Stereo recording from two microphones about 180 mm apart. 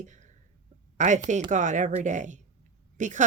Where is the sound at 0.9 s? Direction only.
40° right (ahead or behind).